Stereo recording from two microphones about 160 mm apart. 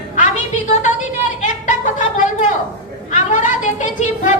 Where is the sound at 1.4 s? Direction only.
50° left (ahead or behind).